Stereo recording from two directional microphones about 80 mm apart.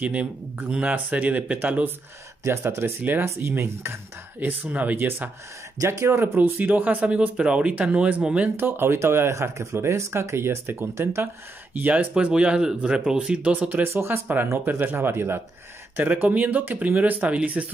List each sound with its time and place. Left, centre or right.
0.0 s speech: centre
2.4 s speech: right
3.0 s speech: right
5.8 s speech: right; by 8.5 s centre
8.5 s speech: right
11.7 s speech: right
13.8 s speech: right